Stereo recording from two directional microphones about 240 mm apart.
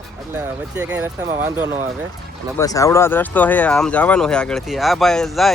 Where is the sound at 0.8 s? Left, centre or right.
Centre.